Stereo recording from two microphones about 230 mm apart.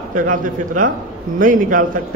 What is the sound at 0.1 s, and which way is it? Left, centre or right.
A man's voice, right.